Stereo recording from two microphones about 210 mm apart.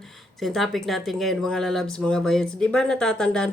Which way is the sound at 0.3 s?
Centre (ahead or behind).